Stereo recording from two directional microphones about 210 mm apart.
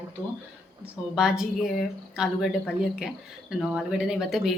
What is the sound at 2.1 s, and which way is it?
Speech, 5° right (ahead or behind).